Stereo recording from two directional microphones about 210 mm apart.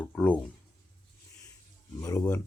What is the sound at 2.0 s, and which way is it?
Speech, 15° left (ahead or behind).